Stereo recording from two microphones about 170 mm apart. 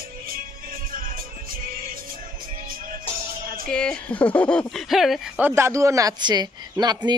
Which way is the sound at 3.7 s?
5° left (ahead or behind).